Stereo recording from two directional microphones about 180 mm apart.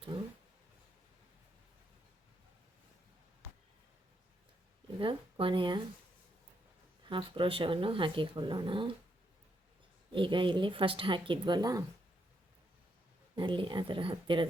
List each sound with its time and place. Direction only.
4.9 s speech: 30° right (ahead or behind)
7.1 s speech: 30° right (ahead or behind)
10.1 s speech: 25° right (ahead or behind)
13.3 s speech: 25° right (ahead or behind)